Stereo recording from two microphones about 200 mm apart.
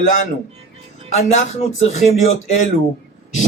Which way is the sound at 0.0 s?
40° left (ahead or behind).